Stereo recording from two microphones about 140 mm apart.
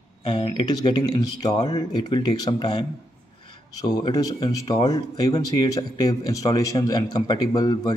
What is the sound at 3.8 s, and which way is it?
Speech, 30° left (ahead or behind).